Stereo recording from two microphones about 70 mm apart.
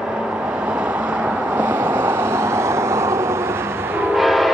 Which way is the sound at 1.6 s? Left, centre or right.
Right.